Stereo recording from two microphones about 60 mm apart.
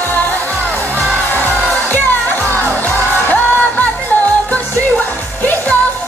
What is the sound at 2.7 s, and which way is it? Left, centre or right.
Music, left.